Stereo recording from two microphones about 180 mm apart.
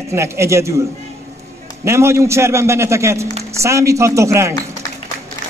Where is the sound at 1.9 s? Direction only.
15° right (ahead or behind).